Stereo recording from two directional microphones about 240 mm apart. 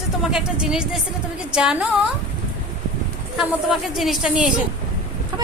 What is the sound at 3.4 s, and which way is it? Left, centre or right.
A woman's voice, centre.